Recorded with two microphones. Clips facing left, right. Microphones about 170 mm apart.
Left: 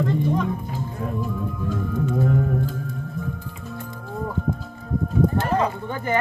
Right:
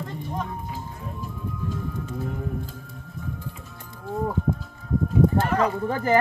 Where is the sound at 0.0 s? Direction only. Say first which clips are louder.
Left 9 dB; 85° left.